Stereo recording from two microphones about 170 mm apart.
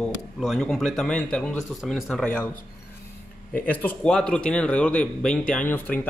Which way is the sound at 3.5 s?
10° left (ahead or behind).